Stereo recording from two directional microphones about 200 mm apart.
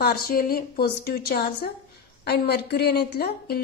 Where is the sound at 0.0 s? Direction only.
50° left (ahead or behind).